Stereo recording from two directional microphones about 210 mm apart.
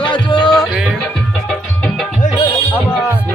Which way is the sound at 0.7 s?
Centre (ahead or behind).